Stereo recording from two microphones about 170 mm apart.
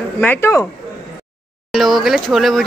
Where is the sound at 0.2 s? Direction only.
15° left (ahead or behind).